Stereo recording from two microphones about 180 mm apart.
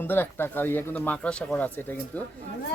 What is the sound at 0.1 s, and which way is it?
Speech, 10° left (ahead or behind).